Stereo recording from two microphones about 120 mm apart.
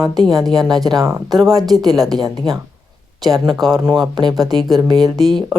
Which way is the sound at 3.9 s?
35° right (ahead or behind).